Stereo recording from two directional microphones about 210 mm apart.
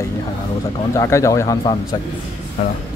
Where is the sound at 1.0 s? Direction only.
15° left (ahead or behind).